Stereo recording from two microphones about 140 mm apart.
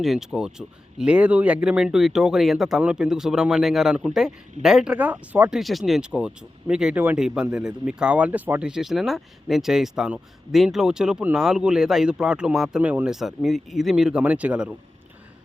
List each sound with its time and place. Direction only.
0.0 s speech: 5° right (ahead or behind)